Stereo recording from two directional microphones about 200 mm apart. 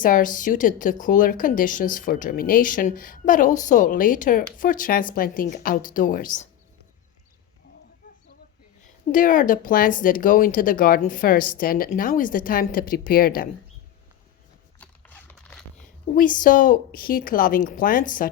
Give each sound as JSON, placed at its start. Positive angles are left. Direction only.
{"t": 0.0, "sound": "a woman's voice", "side_deg": 40}
{"t": 9.1, "sound": "speech", "side_deg": 40}
{"t": 14.8, "sound": "a sound", "side_deg": 10}
{"t": 16.1, "sound": "speech", "side_deg": 40}